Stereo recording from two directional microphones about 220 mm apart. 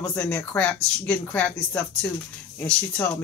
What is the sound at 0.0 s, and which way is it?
Speech, 5° left (ahead or behind).